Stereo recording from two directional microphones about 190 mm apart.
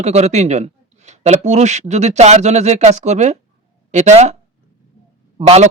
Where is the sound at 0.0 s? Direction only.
35° right (ahead or behind).